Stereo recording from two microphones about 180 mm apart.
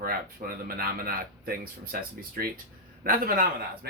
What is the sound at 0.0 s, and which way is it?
A man's voice, 55° right (ahead or behind).